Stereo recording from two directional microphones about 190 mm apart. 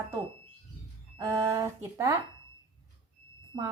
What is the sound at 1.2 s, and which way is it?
Speech, 15° right (ahead or behind).